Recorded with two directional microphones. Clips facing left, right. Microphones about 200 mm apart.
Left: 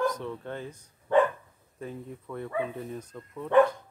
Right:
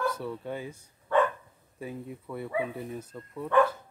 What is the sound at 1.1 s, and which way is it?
Dog, 20° left (ahead or behind).